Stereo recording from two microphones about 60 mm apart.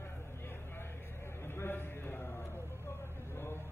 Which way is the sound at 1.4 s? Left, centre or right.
Left.